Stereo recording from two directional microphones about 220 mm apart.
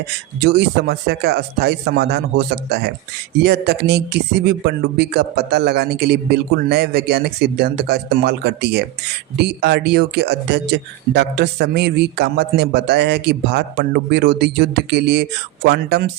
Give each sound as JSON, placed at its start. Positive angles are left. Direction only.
{"t": 0.4, "sound": "speech", "side_deg": -50}